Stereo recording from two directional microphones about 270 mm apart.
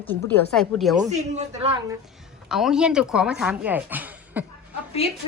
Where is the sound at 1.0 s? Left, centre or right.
Right.